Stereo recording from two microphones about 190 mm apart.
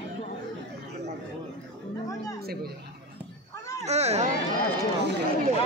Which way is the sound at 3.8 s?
35° right (ahead or behind).